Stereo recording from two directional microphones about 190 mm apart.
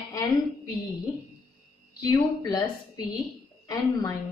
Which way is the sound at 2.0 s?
20° left (ahead or behind).